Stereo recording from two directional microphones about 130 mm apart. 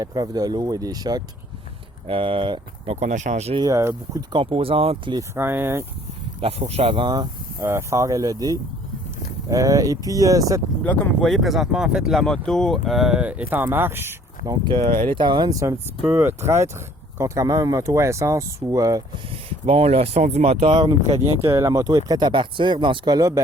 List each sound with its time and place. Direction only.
0.0 s speech: 30° right (ahead or behind)
2.0 s speech: 45° right (ahead or behind)
2.9 s speech: 65° right (ahead or behind)
3.6 s speech: 25° right (ahead or behind)
4.3 s speech: 45° right (ahead or behind)
5.1 s speech: 20° right (ahead or behind)
6.4 s speech: 50° right (ahead or behind)
7.6 s speech: 20° right (ahead or behind)
10.8 s speech: 15° left (ahead or behind)
11.3 s speech: centre (ahead or behind); by 14.5 s 15° right (ahead or behind)
14.5 s speech: 35° right (ahead or behind)
19.6 s speech: 50° right (ahead or behind)
20.7 s speech: 35° right (ahead or behind)
21.1 s speech: 20° right (ahead or behind)